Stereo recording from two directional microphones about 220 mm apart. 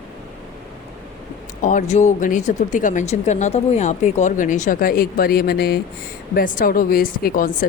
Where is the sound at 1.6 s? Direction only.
35° left (ahead or behind).